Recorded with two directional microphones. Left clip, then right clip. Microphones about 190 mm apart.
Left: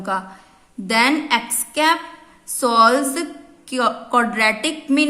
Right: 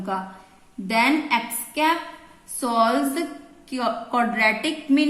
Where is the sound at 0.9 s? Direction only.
35° left (ahead or behind).